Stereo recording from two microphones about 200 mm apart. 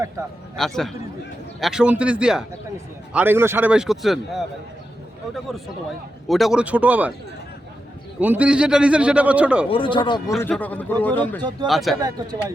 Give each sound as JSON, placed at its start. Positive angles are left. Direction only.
{"t": 0.5, "sound": "a man's voice", "side_deg": 0}
{"t": 6.2, "sound": "a man's voice", "side_deg": 0}
{"t": 8.2, "sound": "a man's voice", "side_deg": -5}
{"t": 9.6, "sound": "speech", "side_deg": 25}
{"t": 10.4, "sound": "a man's voice", "side_deg": 10}
{"t": 11.9, "sound": "speech", "side_deg": -20}